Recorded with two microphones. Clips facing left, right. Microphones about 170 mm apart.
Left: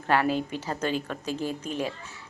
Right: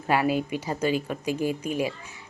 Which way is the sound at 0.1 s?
10° right (ahead or behind).